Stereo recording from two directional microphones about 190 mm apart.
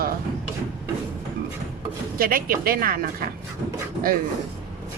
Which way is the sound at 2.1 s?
50° right (ahead or behind).